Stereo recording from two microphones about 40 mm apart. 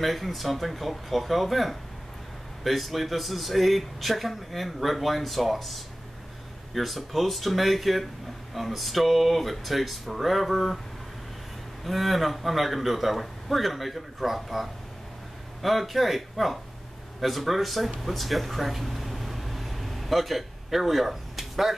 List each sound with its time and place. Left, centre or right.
0.0 s speech: centre
11.8 s speech: centre
18.0 s air conditioning: centre